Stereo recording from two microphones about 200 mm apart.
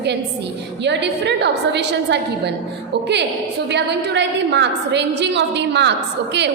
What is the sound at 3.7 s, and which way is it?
A woman's voice, 60° right (ahead or behind).